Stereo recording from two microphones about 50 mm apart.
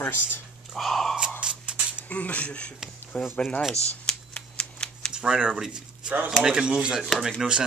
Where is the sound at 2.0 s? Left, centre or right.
Left.